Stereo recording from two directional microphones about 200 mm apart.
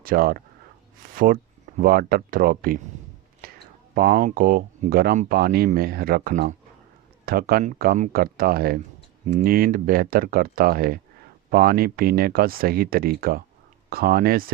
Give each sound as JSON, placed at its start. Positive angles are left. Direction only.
{"t": 0.0, "sound": "speech", "side_deg": -45}
{"t": 3.4, "sound": "a sound", "side_deg": -50}
{"t": 3.9, "sound": "speech", "side_deg": -45}